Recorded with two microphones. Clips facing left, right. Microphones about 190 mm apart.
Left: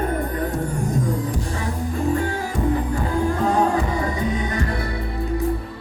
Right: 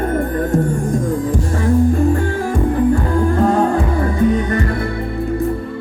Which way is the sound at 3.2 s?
55° right (ahead or behind).